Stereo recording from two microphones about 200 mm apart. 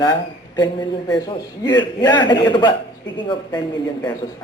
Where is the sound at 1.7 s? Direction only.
20° left (ahead or behind).